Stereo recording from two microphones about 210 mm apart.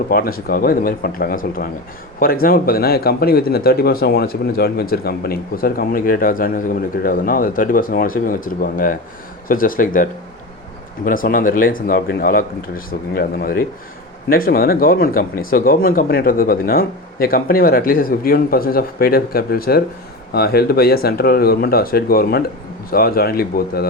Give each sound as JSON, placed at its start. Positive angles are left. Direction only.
{"t": 0.1, "sound": "speech", "side_deg": 45}
{"t": 9.5, "sound": "speech", "side_deg": 40}